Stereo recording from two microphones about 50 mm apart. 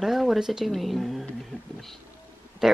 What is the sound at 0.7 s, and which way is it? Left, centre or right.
Speech, centre.